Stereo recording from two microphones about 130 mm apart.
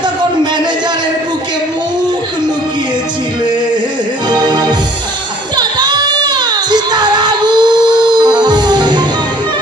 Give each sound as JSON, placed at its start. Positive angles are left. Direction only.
{"t": 4.3, "sound": "music", "side_deg": -35}